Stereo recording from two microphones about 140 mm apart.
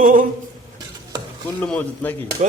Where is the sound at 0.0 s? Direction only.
75° right (ahead or behind).